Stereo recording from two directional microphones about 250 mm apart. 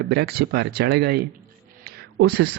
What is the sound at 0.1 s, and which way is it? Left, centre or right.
A man's voice, right.